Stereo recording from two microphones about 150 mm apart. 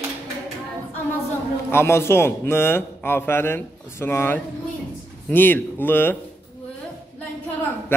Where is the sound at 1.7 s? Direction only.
15° left (ahead or behind).